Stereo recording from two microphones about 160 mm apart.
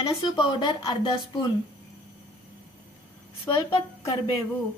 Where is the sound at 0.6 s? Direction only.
30° left (ahead or behind).